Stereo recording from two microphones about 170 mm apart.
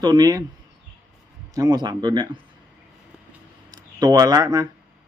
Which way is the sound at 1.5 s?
20° right (ahead or behind).